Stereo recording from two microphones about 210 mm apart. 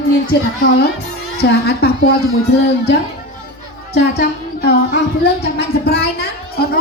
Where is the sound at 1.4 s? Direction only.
50° left (ahead or behind).